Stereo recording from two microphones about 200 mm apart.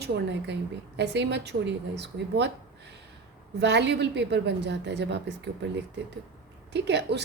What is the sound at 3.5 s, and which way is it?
A woman's voice, 60° right (ahead or behind).